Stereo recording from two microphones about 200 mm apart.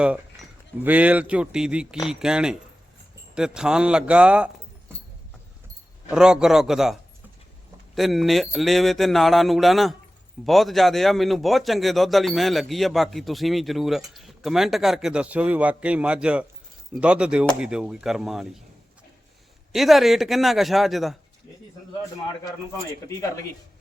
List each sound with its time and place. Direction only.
0.9 s speech: 5° right (ahead or behind)
6.1 s speech: 5° right (ahead or behind)
19.7 s speech: centre (ahead or behind)
23.0 s speech: 15° left (ahead or behind)